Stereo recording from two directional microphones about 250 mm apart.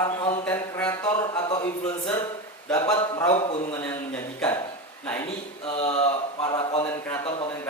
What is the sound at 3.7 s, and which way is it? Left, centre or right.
Speech, centre.